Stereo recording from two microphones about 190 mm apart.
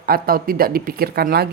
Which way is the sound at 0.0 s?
50° right (ahead or behind).